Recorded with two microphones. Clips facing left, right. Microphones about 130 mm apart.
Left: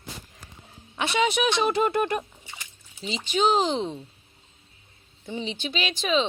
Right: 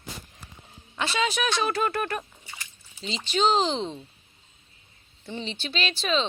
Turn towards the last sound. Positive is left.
turn(degrees=15)  # may be behind; listen again after turning